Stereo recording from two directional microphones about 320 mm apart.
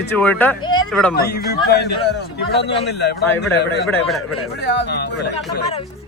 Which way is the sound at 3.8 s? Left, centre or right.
Centre.